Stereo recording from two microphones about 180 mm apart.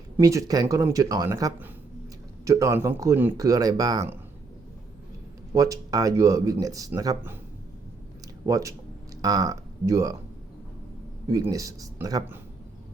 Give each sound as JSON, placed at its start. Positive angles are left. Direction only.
{"t": 0.2, "sound": "speech", "side_deg": -20}
{"t": 5.5, "sound": "speech", "side_deg": -20}
{"t": 8.4, "sound": "speech", "side_deg": -20}
{"t": 11.3, "sound": "speech", "side_deg": -20}